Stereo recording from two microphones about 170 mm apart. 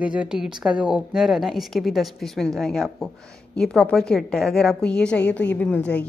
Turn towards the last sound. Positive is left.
turn(degrees=5)  # may be behind; listen again after turning